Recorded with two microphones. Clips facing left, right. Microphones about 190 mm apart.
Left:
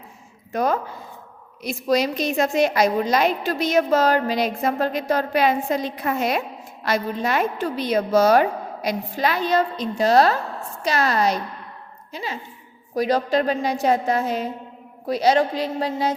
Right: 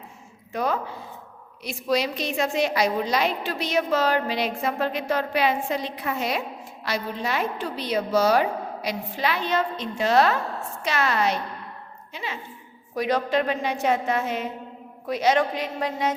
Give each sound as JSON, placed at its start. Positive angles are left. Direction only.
{"t": 0.5, "sound": "a woman's voice", "side_deg": 45}